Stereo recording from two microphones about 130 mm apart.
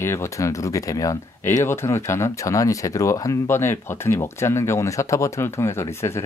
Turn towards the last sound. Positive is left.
turn(degrees=20)  # may be behind; listen again after turning